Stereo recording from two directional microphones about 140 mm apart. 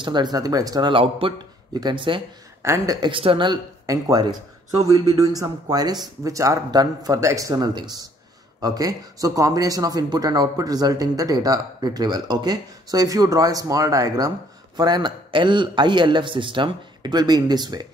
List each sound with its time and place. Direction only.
0.0 s a man's voice: 30° right (ahead or behind)
2.6 s speech: 20° right (ahead or behind)
3.0 s a man's voice: 40° right (ahead or behind)
3.8 s a man's voice: 25° right (ahead or behind)